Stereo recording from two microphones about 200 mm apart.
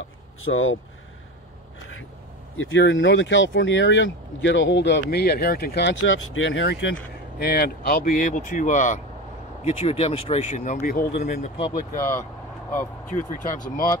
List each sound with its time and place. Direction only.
0.4 s speech: 85° left
2.5 s speech: 75° left (ahead or behind); by 11.5 s 35° left (ahead or behind)
11.5 s speech: 25° left (ahead or behind)
12.0 s speech: 15° left (ahead or behind)
13.1 s speech: 40° left (ahead or behind)